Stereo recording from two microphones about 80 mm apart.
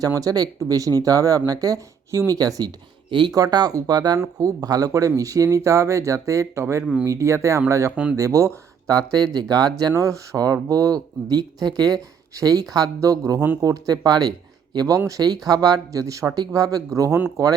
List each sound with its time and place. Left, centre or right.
0.0 s speech: right
3.1 s speech: right
3.3 s speech: right
4.2 s speech: right
8.9 s speech: right
9.9 s speech: right
14.9 s speech: right